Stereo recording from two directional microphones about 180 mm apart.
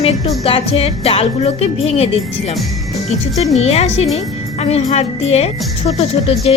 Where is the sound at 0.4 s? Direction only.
30° left (ahead or behind).